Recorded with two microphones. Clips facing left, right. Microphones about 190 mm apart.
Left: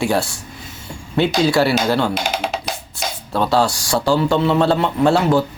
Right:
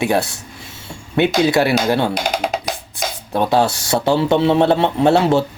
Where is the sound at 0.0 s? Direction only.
20° right (ahead or behind).